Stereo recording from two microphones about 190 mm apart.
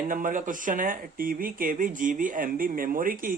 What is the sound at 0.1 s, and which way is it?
Speech, 45° right (ahead or behind).